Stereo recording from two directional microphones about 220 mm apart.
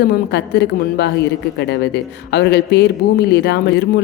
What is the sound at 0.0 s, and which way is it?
A man's voice, 50° left (ahead or behind).